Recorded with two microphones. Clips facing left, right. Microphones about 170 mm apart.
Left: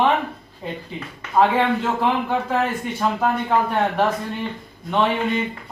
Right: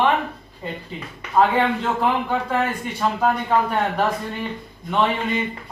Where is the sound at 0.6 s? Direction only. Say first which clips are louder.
Left 1 dB; centre (ahead or behind).